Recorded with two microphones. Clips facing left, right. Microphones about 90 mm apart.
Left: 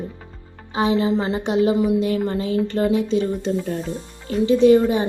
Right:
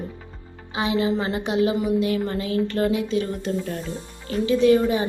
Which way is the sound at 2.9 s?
30° left (ahead or behind).